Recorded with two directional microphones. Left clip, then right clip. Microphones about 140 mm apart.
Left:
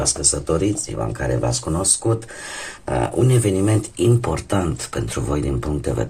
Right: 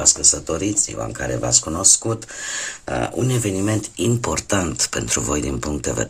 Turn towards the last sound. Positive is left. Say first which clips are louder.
# even
turn(degrees=-35)  # may be behind; listen again after turning